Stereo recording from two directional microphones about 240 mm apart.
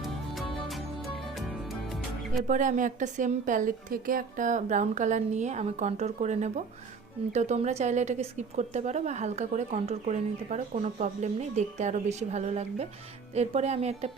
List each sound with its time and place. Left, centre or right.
1.2 s music: centre
2.5 s a woman's voice: right